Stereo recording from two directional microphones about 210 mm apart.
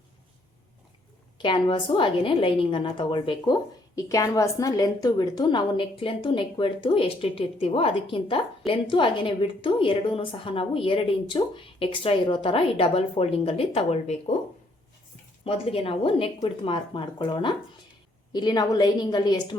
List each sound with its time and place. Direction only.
1.4 s a woman's voice: 25° left (ahead or behind)
15.4 s a woman's voice: 25° left (ahead or behind)